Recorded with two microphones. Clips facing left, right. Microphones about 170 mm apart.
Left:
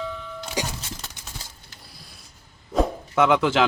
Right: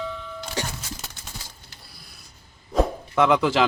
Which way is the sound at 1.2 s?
15° left (ahead or behind).